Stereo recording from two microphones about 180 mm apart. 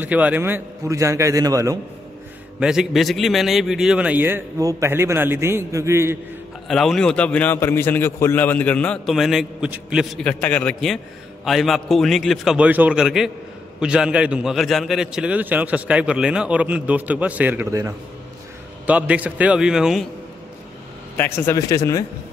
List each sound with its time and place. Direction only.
0.0 s a man's voice: 10° right (ahead or behind)
2.6 s a man's voice: 5° right (ahead or behind)
6.7 s a man's voice: centre (ahead or behind)
10.2 s a man's voice: 5° left (ahead or behind)
21.2 s speech: 10° left (ahead or behind)